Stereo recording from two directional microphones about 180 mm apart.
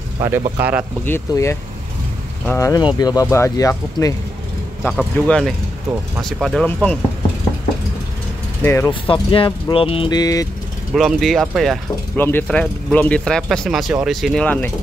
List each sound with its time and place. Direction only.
0.2 s speech: 15° right (ahead or behind)
1.0 s speech: 15° left (ahead or behind)
4.8 s speech: 5° left (ahead or behind)
8.6 s speech: 15° left (ahead or behind)
9.0 s speech: 30° left (ahead or behind)
11.0 s speech: centre (ahead or behind)
12.2 s speech: 10° left (ahead or behind)